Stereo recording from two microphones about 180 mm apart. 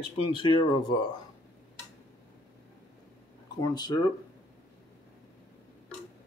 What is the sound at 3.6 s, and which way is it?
Speech, 20° left (ahead or behind).